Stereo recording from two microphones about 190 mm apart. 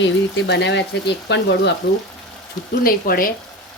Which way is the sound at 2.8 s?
50° left (ahead or behind).